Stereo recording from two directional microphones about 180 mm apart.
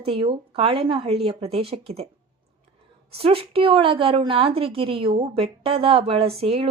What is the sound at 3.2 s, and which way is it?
A woman's voice, 30° right (ahead or behind).